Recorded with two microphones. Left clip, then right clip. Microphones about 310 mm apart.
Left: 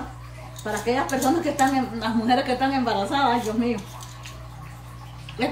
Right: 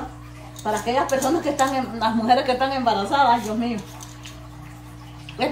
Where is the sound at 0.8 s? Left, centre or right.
Centre.